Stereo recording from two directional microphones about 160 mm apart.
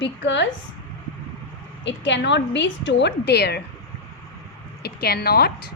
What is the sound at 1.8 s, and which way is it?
A woman's voice, 90° left.